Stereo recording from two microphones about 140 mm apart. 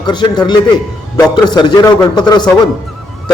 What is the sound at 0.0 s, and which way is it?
A man's voice, 30° left (ahead or behind).